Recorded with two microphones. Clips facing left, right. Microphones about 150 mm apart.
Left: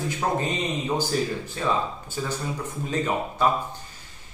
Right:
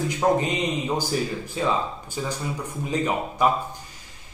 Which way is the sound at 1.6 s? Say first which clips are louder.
Right 2 dB; 15° right (ahead or behind).